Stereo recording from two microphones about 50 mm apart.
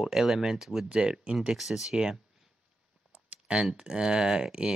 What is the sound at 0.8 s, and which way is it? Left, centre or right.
Speech, centre.